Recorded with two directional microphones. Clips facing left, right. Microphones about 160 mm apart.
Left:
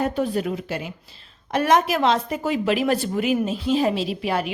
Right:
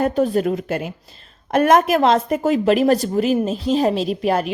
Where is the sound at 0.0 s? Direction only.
45° right (ahead or behind).